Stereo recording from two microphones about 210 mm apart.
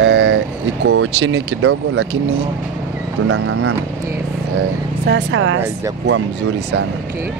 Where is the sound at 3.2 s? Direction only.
75° right (ahead or behind).